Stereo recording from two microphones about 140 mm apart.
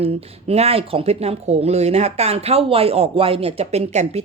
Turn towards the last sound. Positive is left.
turn(degrees=-50)  # may be behind; listen again after turning